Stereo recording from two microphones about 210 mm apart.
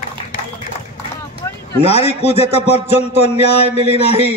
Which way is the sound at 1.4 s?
15° left (ahead or behind).